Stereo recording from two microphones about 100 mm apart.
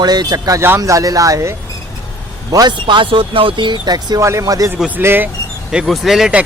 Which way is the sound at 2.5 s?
45° right (ahead or behind).